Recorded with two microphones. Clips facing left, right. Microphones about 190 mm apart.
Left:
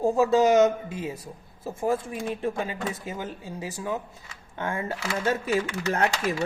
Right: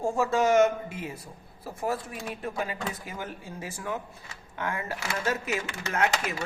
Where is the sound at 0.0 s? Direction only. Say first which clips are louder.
Left 5 dB; 20° left (ahead or behind).